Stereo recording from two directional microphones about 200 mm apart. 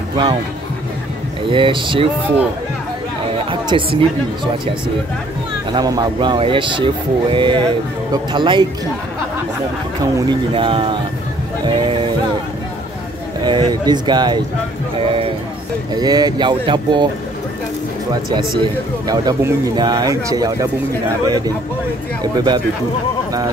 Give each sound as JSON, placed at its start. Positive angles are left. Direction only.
{"t": 1.5, "sound": "speech", "side_deg": -25}
{"t": 3.6, "sound": "speech", "side_deg": -25}
{"t": 5.7, "sound": "speech", "side_deg": -20}
{"t": 10.1, "sound": "speech", "side_deg": -25}
{"t": 13.4, "sound": "speech", "side_deg": -20}
{"t": 15.0, "sound": "music", "side_deg": -30}
{"t": 15.9, "sound": "speech", "side_deg": -20}
{"t": 18.6, "sound": "speech", "side_deg": -20}
{"t": 22.2, "sound": "speech", "side_deg": -20}